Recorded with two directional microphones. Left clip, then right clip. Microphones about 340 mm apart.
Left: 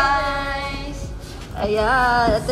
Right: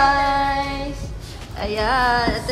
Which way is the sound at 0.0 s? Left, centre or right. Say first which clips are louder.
Right 3 dB; centre.